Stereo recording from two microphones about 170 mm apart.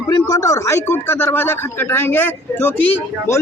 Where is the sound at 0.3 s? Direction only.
20° left (ahead or behind).